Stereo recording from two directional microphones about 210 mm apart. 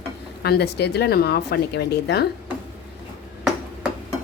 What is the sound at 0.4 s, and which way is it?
Speech, 50° left (ahead or behind).